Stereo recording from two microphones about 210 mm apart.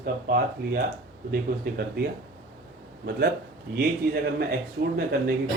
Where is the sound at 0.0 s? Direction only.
45° right (ahead or behind).